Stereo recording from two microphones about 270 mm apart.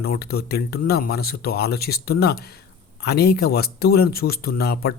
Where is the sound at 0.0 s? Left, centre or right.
Left.